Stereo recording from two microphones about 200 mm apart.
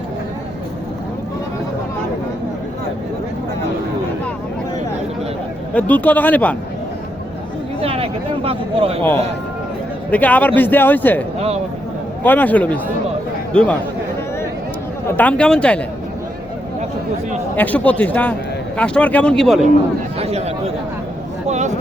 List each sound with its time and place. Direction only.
5.7 s speech: 10° left (ahead or behind)
7.8 s speech: 30° right (ahead or behind)
10.1 s speech: 10° left (ahead or behind)
15.1 s speech: 5° left (ahead or behind)
17.6 s speech: 10° left (ahead or behind)
20.1 s speech: 30° right (ahead or behind)